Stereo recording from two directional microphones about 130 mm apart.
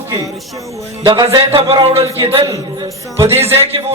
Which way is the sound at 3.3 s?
20° right (ahead or behind).